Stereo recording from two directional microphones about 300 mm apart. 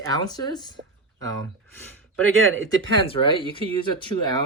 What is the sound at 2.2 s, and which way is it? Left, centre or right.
Speech, right.